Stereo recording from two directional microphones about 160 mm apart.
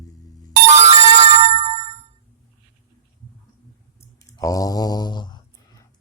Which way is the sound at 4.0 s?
20° left (ahead or behind).